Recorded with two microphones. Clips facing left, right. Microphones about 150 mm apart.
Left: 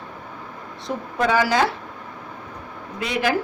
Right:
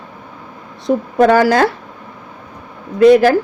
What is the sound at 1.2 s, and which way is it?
Speech, 55° right (ahead or behind).